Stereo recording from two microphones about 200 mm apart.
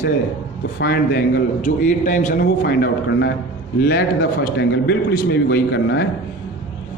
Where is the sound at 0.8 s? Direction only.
50° left (ahead or behind).